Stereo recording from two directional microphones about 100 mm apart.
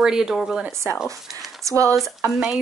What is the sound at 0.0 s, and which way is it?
Speech, 5° right (ahead or behind).